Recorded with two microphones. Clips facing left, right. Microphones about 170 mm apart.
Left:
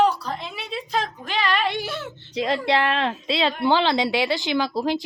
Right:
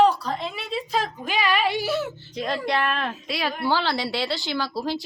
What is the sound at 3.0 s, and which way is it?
A woman's voice, 25° left (ahead or behind).